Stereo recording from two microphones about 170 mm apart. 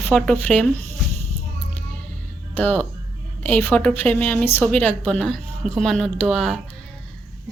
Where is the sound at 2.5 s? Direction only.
10° left (ahead or behind).